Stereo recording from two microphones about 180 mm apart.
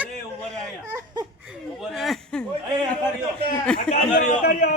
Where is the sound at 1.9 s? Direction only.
Centre (ahead or behind).